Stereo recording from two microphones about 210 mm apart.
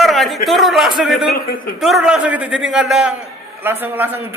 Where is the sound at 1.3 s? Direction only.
45° left (ahead or behind).